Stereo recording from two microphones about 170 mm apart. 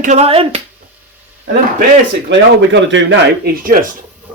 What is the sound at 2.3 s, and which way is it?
Speech, 90° right.